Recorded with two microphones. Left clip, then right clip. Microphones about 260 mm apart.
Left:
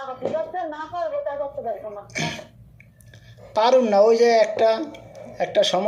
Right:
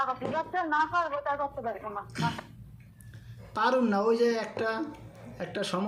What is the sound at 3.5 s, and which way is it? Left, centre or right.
Speech, centre.